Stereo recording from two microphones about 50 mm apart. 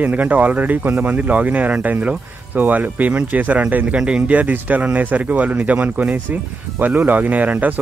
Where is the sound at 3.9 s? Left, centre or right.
Centre.